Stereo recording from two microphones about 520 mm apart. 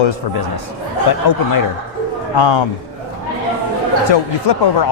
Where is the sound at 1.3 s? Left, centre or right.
Left.